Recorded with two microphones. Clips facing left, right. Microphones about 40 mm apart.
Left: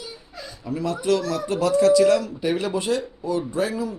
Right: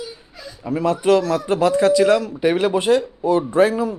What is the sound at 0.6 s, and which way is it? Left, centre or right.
A man's voice, right.